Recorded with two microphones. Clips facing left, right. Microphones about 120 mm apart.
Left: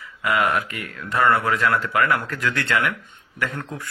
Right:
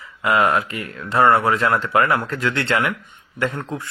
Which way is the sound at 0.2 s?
25° right (ahead or behind).